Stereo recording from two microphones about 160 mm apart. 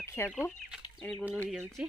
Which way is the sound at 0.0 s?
15° left (ahead or behind).